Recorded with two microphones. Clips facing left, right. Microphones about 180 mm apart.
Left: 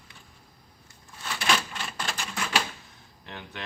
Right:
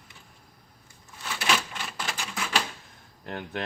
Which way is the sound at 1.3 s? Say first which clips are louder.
Even; 5° right (ahead or behind).